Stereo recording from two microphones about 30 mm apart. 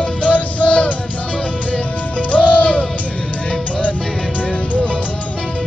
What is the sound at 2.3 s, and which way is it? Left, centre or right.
Music, left.